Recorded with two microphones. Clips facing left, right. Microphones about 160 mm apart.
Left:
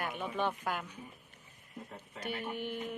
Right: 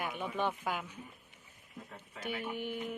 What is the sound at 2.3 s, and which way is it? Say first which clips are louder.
Speech: even; 45° left (ahead or behind).